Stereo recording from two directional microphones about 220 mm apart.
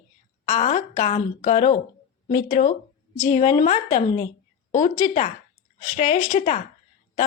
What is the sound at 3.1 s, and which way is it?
A woman's voice, 25° left (ahead or behind).